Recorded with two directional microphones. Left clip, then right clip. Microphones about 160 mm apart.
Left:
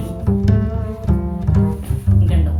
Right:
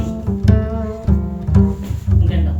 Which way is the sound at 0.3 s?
Centre (ahead or behind).